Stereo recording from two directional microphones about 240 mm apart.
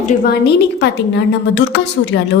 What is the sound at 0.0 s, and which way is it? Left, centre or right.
Speech, left.